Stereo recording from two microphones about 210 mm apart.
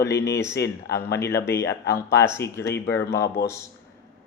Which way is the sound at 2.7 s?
55° left (ahead or behind).